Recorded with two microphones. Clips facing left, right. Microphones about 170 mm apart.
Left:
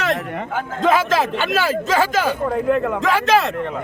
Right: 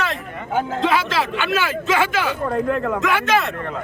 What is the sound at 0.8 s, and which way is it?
A man's voice, 45° left (ahead or behind).